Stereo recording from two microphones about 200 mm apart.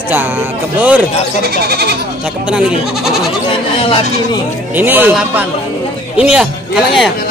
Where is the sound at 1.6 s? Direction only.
55° right (ahead or behind).